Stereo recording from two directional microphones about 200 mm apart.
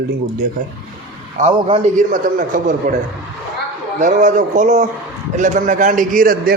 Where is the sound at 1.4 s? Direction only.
30° right (ahead or behind).